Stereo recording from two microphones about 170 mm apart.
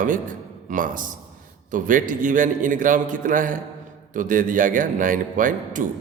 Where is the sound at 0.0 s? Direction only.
50° right (ahead or behind).